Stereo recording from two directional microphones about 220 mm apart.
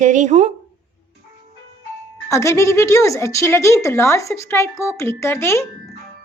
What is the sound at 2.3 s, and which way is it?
A woman's voice, 15° left (ahead or behind).